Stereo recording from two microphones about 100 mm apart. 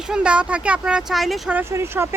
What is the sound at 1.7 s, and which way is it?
Speech, 25° right (ahead or behind).